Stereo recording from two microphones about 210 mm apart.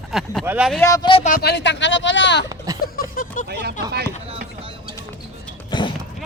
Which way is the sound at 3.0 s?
40° left (ahead or behind).